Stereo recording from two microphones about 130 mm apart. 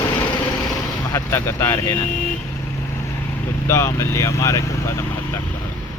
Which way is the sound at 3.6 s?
20° left (ahead or behind).